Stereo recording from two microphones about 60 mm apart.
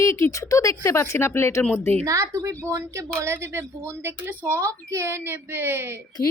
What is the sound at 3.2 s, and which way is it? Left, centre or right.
Speech, right.